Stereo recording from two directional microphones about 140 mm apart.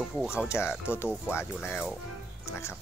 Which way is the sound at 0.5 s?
15° left (ahead or behind).